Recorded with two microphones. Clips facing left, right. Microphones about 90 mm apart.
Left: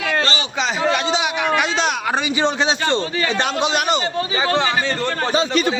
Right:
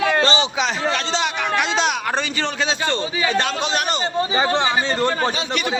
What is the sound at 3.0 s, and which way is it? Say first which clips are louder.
Speech: even; 10° right (ahead or behind).